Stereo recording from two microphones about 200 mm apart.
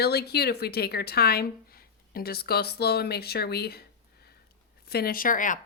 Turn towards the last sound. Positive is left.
turn(degrees=40)  # may be behind; listen again after turning